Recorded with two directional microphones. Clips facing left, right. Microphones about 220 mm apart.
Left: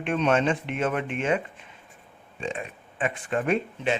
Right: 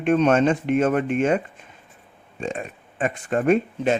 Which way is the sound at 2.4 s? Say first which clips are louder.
Right 3 dB; 45° right (ahead or behind).